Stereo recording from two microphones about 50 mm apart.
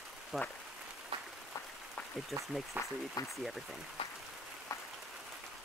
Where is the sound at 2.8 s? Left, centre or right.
Right.